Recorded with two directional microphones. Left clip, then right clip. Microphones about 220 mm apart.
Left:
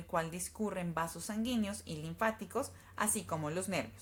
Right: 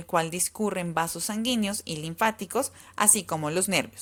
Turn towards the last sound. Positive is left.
turn(degrees=-40)  # may be behind; listen again after turning